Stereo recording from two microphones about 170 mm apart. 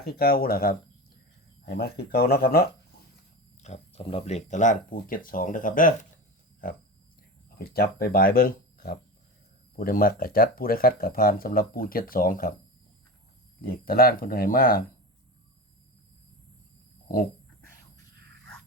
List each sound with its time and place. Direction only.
0.0 s speech: 65° left (ahead or behind)
3.6 s speech: 40° left (ahead or behind)
7.6 s speech: 65° left (ahead or behind)
13.6 s speech: 60° left (ahead or behind)